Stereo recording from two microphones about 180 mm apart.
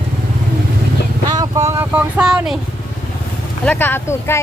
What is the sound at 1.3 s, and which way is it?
Vehicle, 20° right (ahead or behind).